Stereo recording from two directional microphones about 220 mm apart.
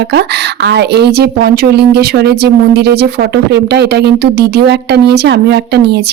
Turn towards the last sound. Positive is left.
turn(degrees=-50)  # may be behind; listen again after turning